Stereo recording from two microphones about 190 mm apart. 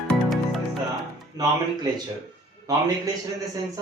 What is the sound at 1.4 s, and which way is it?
Speech, 20° right (ahead or behind).